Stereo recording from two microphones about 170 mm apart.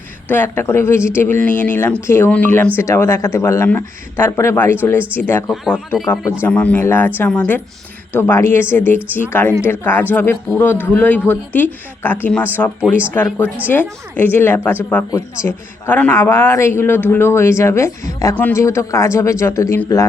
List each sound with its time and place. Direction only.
0.3 s a man's voice: 10° left (ahead or behind)